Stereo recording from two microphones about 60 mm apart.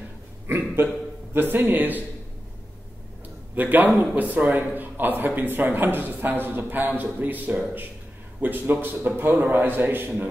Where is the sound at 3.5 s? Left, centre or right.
Right.